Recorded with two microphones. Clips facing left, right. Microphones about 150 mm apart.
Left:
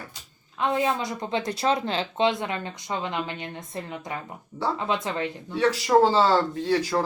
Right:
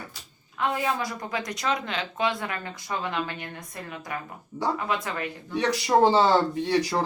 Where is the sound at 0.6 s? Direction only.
20° left (ahead or behind).